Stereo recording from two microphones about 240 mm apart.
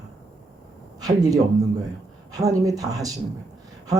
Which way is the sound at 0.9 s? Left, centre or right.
Centre.